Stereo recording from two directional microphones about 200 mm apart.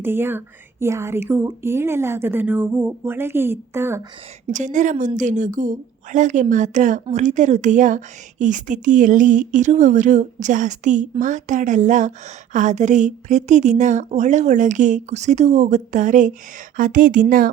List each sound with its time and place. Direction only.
0.0 s speech: 10° right (ahead or behind)
4.5 s a woman's voice: 40° right (ahead or behind)